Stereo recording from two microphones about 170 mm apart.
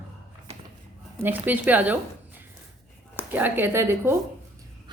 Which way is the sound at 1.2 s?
10° right (ahead or behind).